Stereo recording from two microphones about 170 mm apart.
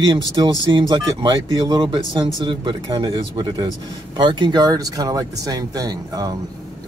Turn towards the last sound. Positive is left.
turn(degrees=-20)  # may be behind; listen again after turning